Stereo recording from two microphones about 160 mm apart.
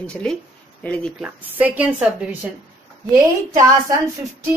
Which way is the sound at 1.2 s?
10° right (ahead or behind).